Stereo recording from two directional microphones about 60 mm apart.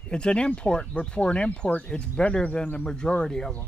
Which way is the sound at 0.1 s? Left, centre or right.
Centre.